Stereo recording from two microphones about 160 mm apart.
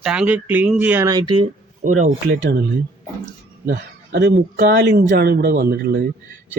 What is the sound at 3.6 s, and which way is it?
Speech, 90° right.